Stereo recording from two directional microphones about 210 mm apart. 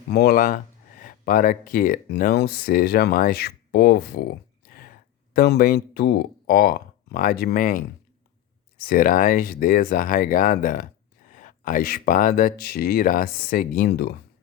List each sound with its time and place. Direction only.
0.1 s speech: 45° left (ahead or behind)